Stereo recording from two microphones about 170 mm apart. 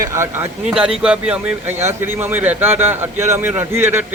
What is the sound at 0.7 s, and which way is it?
Speech, 5° right (ahead or behind).